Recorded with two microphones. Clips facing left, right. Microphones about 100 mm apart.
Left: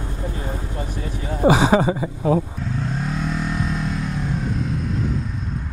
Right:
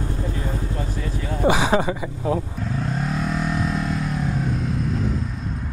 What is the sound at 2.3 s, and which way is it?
Vehicle, 5° left (ahead or behind).